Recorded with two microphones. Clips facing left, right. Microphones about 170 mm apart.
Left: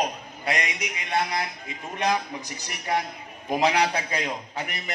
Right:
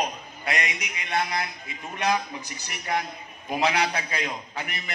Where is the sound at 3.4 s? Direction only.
35° left (ahead or behind).